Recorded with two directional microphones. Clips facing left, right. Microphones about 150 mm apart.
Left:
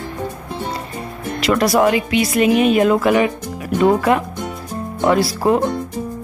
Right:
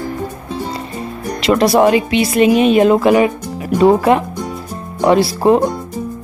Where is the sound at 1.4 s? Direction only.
25° right (ahead or behind).